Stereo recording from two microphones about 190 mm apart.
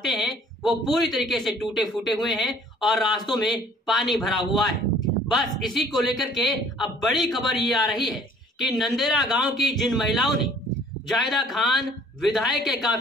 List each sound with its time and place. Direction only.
0.0 s a man's voice: centre (ahead or behind)